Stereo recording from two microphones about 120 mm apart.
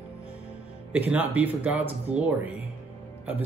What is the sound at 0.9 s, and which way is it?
Speech, 10° right (ahead or behind).